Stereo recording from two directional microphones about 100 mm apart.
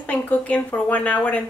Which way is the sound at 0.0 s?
15° left (ahead or behind).